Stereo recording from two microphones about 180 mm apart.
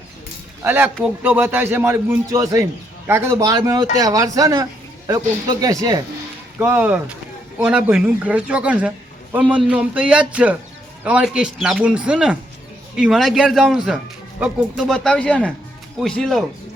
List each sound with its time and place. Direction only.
0.6 s a man's voice: 10° right (ahead or behind)